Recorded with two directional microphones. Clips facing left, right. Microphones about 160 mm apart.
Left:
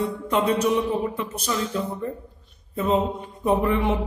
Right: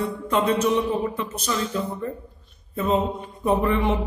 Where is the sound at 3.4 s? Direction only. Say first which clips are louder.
Even; 10° left (ahead or behind).